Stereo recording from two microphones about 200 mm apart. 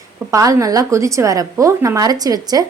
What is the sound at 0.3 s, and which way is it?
A woman's voice, 15° right (ahead or behind).